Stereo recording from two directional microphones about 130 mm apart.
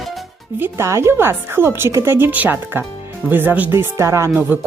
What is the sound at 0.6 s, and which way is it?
Speech, 20° right (ahead or behind).